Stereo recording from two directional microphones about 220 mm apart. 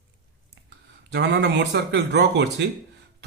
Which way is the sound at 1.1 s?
55° right (ahead or behind).